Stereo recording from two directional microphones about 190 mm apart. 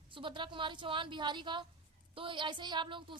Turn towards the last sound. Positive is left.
turn(degrees=-25)  # may be behind; listen again after turning